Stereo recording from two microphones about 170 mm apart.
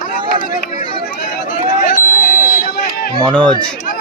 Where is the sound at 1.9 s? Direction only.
55° left (ahead or behind).